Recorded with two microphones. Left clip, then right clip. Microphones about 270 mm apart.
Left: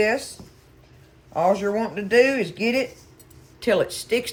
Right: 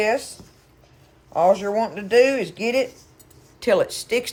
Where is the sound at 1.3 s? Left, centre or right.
Right.